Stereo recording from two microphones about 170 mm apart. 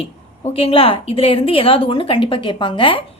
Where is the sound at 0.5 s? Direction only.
30° left (ahead or behind).